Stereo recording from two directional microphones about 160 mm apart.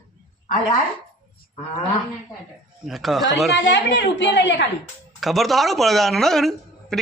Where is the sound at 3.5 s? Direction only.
90° left.